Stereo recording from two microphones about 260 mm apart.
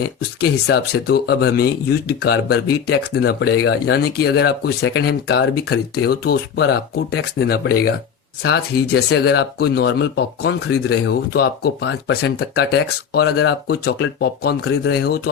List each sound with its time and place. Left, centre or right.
0.3 s speech: left